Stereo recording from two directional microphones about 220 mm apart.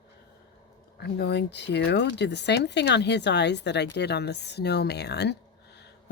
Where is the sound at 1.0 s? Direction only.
50° left (ahead or behind).